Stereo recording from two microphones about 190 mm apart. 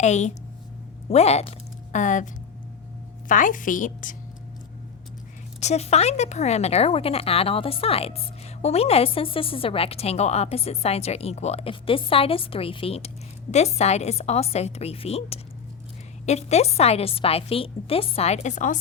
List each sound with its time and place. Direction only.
0.0 s a woman's voice: 35° left (ahead or behind)
5.5 s speech: 35° left (ahead or behind)